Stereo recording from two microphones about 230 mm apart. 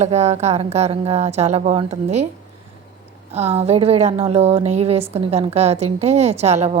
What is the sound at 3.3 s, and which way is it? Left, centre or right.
Speech, right.